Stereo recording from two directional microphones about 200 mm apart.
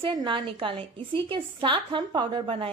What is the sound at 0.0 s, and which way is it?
A woman's voice, 25° right (ahead or behind).